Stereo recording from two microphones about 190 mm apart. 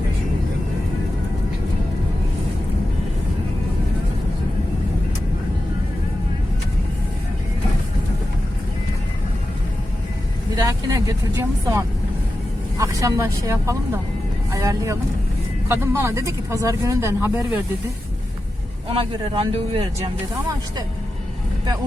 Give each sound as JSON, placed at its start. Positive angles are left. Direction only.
{"t": 10.5, "sound": "speech", "side_deg": -20}
{"t": 18.9, "sound": "speech", "side_deg": -25}